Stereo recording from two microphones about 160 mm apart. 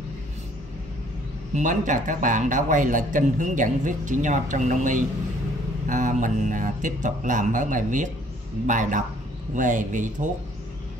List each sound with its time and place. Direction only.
1.5 s speech: 50° right (ahead or behind)